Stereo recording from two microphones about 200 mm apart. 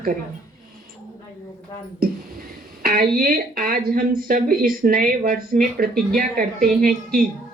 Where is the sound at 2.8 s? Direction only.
45° right (ahead or behind).